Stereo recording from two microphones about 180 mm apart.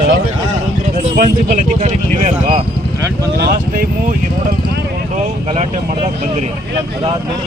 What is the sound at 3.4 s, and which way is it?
Speech, 60° right (ahead or behind).